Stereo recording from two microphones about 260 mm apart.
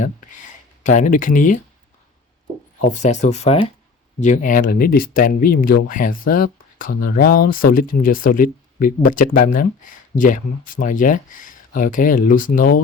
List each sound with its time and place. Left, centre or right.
0.8 s speech: left
2.9 s speech: left